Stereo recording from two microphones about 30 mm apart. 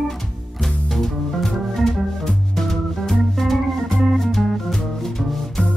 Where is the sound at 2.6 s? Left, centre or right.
Centre.